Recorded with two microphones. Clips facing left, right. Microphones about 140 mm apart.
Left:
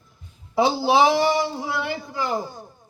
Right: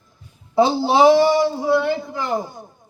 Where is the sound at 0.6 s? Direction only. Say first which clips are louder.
Right 4 dB; 25° right (ahead or behind).